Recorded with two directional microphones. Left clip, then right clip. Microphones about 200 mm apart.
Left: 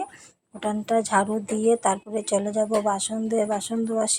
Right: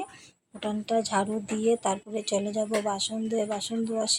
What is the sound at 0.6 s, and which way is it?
A woman's voice, 15° left (ahead or behind).